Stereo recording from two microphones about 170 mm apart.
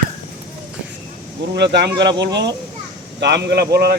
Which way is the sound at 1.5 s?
80° right.